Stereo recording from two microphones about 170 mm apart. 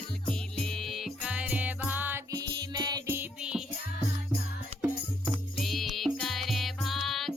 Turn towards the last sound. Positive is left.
turn(degrees=0)  # may be behind; listen again after turning